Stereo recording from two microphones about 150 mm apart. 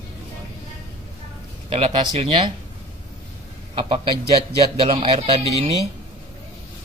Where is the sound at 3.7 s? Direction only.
35° right (ahead or behind).